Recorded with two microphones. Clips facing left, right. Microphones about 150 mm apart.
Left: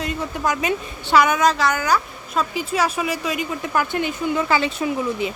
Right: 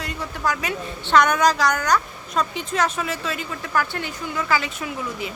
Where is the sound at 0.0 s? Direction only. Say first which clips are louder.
Left 3 dB; 20° left (ahead or behind).